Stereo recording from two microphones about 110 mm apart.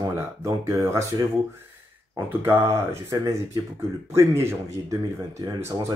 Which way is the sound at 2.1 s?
20° right (ahead or behind).